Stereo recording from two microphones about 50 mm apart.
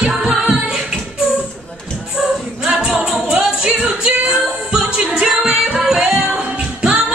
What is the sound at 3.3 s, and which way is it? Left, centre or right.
Music, centre.